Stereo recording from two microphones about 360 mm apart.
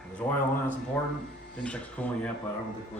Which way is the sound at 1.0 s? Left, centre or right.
Centre.